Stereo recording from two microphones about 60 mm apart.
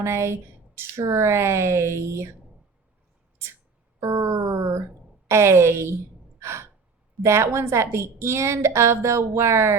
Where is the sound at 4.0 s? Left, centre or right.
Right.